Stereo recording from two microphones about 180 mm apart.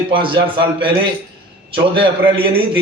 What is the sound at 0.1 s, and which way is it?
Speech, 30° right (ahead or behind).